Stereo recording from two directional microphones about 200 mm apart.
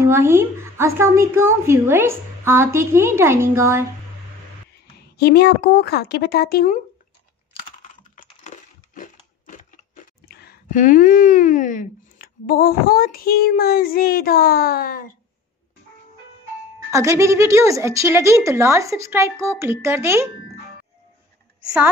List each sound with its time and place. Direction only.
0.0 s a woman's voice: 10° right (ahead or behind)
5.1 s speech: 55° left (ahead or behind)
7.5 s computer keyboard: 40° left (ahead or behind)
10.2 s speech: 45° left (ahead or behind)
16.9 s a woman's voice: 15° right (ahead or behind)